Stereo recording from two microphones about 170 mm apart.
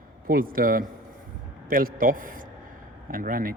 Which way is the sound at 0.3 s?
55° right (ahead or behind).